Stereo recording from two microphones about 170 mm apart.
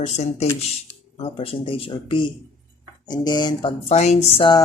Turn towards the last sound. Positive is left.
turn(degrees=30)  # may be behind; listen again after turning